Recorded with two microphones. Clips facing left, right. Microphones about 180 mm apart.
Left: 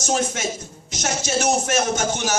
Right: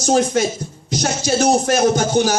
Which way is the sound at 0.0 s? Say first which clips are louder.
Right 7 dB; 35° right (ahead or behind).